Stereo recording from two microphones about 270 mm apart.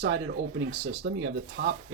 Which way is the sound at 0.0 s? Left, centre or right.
Right.